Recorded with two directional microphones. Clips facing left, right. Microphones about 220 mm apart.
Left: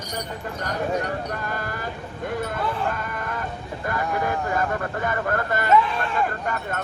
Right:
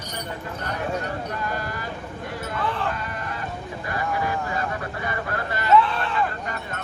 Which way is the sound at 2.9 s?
50° left (ahead or behind).